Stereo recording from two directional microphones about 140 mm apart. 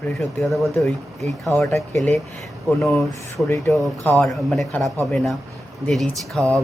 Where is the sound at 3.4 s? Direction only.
Centre (ahead or behind).